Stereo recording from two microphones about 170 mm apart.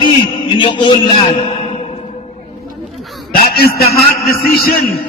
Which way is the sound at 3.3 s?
60° left (ahead or behind).